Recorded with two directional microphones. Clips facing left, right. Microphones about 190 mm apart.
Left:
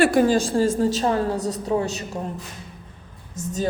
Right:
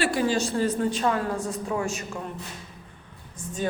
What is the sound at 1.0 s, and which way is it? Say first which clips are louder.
A woman's voice: left 4 dB; 30° left (ahead or behind).